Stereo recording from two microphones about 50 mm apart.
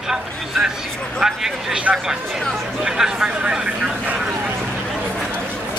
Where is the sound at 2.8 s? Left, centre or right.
Centre.